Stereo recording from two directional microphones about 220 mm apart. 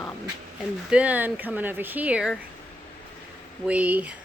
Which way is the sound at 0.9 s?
5° right (ahead or behind).